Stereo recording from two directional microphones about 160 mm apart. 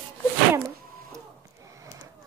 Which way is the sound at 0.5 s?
15° right (ahead or behind).